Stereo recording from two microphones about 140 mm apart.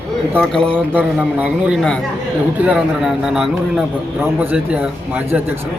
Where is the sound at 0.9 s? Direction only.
10° right (ahead or behind).